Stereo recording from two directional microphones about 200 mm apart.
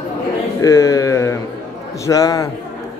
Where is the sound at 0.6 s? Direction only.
15° left (ahead or behind).